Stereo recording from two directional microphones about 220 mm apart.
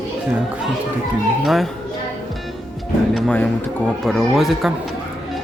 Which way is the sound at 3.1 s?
5° left (ahead or behind).